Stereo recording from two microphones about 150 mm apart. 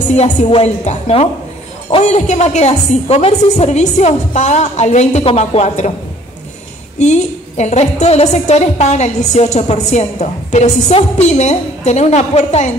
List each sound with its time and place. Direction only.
0.1 s a woman's voice: 45° left (ahead or behind)
7.0 s a woman's voice: 50° left (ahead or behind)